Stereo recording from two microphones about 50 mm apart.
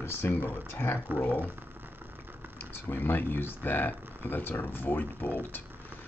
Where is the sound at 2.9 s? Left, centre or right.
Left.